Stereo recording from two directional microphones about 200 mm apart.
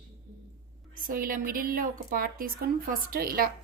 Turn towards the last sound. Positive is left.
turn(degrees=-45)  # may be behind; listen again after turning